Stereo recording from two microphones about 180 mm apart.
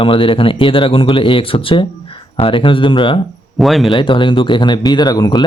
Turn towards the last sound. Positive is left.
turn(degrees=20)  # may be behind; listen again after turning